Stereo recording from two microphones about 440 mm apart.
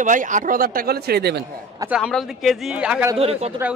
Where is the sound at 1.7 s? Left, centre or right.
Centre.